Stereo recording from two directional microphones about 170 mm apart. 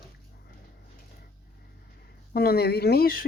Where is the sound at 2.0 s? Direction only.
65° left (ahead or behind).